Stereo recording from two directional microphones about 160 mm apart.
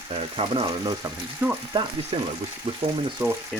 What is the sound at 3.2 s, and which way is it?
Frying, 15° right (ahead or behind).